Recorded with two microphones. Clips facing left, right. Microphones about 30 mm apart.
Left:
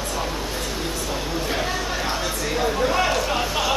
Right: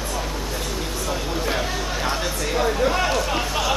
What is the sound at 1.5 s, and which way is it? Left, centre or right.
Chatter, centre.